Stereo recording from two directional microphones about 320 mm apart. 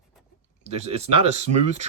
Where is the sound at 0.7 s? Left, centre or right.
Centre.